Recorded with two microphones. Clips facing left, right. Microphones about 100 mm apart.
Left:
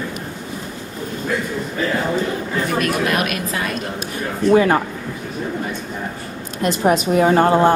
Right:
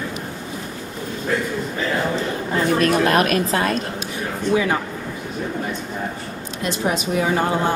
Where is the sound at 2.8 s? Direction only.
35° right (ahead or behind).